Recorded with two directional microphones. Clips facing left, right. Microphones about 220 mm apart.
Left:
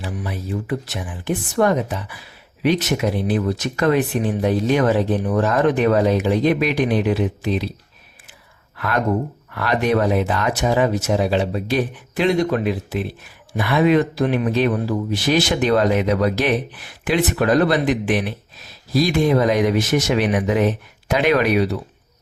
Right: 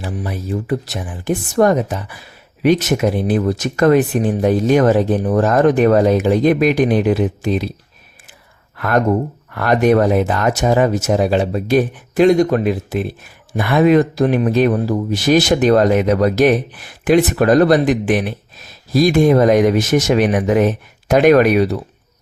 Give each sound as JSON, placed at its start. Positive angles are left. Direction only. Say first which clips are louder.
{"t": 0.0, "sound": "speech", "louder": "right 3 dB", "side_deg": -40}
{"t": 9.5, "sound": "speech", "louder": "right 6 dB", "side_deg": -45}